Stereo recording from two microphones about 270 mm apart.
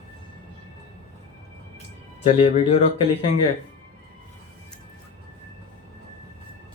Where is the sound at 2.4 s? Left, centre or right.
Left.